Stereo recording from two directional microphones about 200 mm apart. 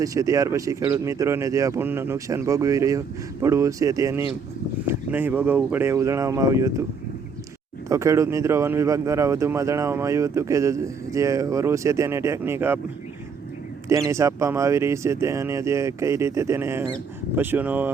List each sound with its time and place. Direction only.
0.0 s speech: 15° right (ahead or behind)
7.9 s speech: 15° right (ahead or behind)
13.8 s speech: 15° right (ahead or behind)